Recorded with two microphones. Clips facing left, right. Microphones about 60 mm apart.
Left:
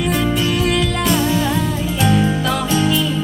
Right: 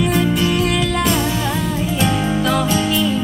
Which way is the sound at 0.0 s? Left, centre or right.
Centre.